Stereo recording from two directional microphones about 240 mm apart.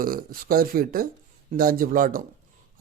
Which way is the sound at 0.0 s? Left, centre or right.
Right.